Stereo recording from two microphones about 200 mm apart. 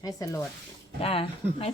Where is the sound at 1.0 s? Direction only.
30° left (ahead or behind).